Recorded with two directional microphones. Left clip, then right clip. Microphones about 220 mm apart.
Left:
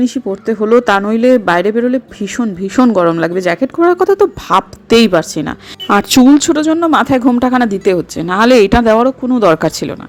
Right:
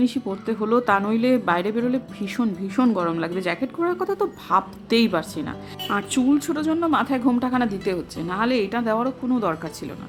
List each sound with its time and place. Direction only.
0.0 s speech: 20° left (ahead or behind); by 10.0 s 35° left (ahead or behind)